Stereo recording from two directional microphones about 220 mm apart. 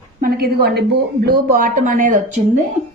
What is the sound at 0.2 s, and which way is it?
A woman's voice, 45° right (ahead or behind).